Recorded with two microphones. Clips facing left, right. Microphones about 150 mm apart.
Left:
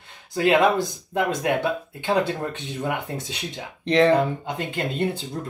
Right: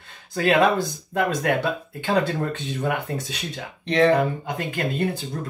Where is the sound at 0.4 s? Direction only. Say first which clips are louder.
Even; 20° left (ahead or behind).